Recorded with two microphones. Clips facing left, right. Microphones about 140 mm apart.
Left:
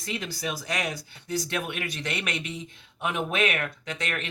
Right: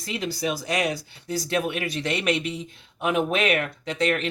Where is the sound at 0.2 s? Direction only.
30° right (ahead or behind).